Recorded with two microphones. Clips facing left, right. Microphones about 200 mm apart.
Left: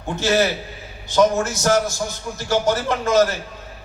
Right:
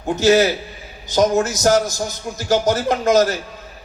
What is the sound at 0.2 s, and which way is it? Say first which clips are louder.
A man's voice: right 5 dB; 40° right (ahead or behind).